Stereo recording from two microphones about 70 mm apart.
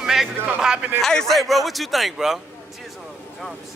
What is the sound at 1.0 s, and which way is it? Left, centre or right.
A man's voice, centre.